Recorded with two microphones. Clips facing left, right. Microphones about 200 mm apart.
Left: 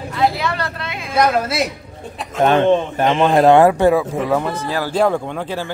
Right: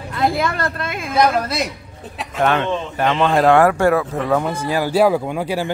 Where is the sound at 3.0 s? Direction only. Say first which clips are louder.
Right 2 dB; 15° left (ahead or behind).